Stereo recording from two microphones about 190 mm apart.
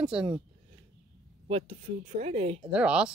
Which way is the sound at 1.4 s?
30° right (ahead or behind).